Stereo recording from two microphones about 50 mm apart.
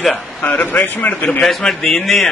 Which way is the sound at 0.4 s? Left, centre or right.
Left.